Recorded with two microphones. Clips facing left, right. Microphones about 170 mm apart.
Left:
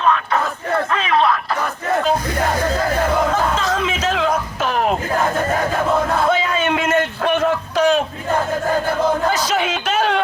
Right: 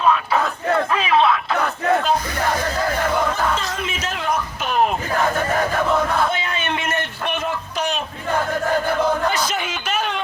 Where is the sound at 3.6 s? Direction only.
90° left.